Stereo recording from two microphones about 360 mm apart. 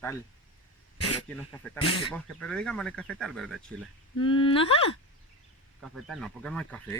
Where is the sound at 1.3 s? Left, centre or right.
Centre.